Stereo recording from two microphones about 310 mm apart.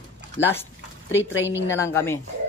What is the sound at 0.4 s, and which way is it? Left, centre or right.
Speech, left.